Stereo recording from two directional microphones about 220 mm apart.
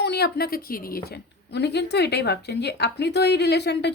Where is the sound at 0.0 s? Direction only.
50° left (ahead or behind).